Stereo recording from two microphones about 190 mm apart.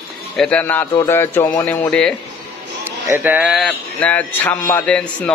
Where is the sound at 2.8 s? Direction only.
10° right (ahead or behind).